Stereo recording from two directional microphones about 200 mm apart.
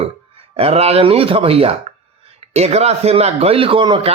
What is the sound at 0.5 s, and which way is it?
A man's voice, 30° right (ahead or behind).